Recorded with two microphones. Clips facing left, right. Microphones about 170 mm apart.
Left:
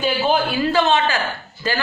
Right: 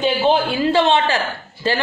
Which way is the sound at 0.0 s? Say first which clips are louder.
Right 2 dB; 25° right (ahead or behind).